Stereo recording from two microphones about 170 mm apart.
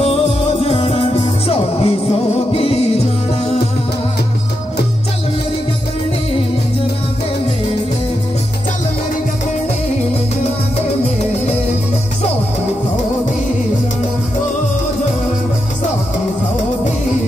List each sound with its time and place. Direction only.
0.0 s music: 35° left (ahead or behind)